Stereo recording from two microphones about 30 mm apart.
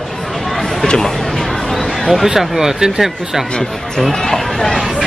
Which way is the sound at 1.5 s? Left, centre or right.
Centre.